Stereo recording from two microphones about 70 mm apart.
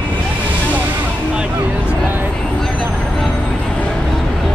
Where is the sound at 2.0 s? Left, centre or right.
Right.